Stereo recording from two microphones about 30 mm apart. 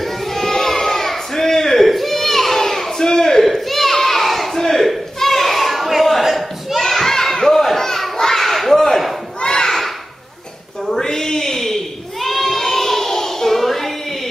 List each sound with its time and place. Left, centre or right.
0.0 s a sound: centre
11.0 s child singing: centre
13.6 s music: centre